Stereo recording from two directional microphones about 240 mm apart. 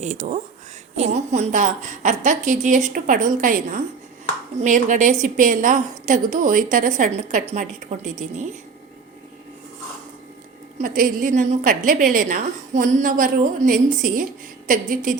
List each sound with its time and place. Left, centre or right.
0.0 s a woman's voice: right
10.8 s a woman's voice: right